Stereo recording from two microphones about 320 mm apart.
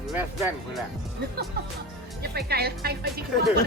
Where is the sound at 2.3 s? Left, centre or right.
Right.